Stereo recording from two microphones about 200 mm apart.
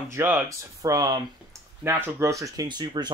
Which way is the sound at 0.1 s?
10° right (ahead or behind).